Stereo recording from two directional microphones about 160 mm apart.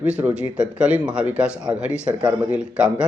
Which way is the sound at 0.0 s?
10° right (ahead or behind).